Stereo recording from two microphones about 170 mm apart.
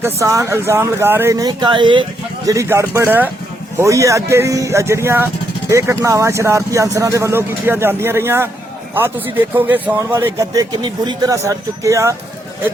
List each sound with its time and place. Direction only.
0.0 s speech: 15° right (ahead or behind)
2.5 s speech: 15° right (ahead or behind)